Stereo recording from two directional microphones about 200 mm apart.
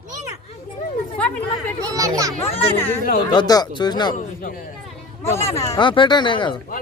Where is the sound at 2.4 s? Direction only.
30° left (ahead or behind).